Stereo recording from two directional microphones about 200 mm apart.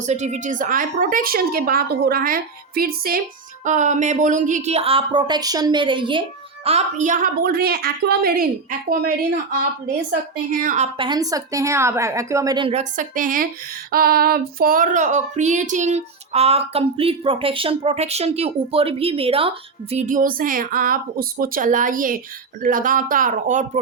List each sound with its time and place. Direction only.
0.0 s a woman's voice: 35° right (ahead or behind)
3.6 s a woman's voice: 35° right (ahead or behind)
10.1 s a woman's voice: 45° right (ahead or behind)
10.9 s speech: 25° right (ahead or behind); by 13.5 s 45° right (ahead or behind)
13.9 s a sound: 50° right (ahead or behind)